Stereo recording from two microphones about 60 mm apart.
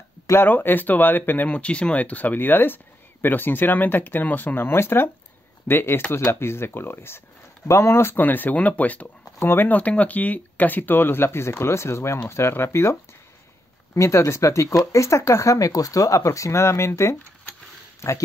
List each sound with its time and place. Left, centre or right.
0.5 s speech: left
1.5 s speech: centre; by 8.2 s left
8.2 s speech: left
9.4 s speech: left
9.7 s speech: left
13.9 s speech: left